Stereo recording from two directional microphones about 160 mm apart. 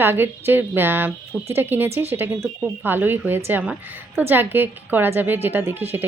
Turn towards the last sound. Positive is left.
turn(degrees=-15)  # may be behind; listen again after turning